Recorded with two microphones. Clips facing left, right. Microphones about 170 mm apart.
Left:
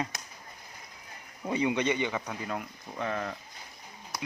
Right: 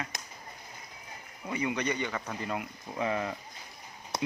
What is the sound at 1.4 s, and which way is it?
Speech, 25° left (ahead or behind).